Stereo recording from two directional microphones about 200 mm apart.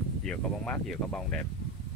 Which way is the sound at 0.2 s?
5° left (ahead or behind).